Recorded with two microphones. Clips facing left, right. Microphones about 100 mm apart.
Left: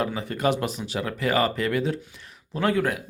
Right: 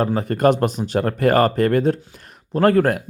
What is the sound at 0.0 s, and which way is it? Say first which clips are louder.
Speech: right 8 dB; 45° right (ahead or behind).